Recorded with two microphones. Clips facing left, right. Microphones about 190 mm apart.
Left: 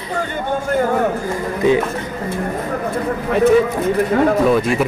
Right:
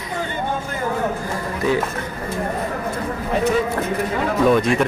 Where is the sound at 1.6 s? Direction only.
20° left (ahead or behind).